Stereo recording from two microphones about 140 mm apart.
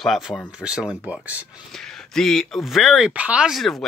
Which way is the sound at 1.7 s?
5° left (ahead or behind).